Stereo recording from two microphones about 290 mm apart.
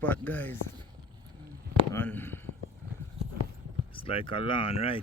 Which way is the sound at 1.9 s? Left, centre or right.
Centre.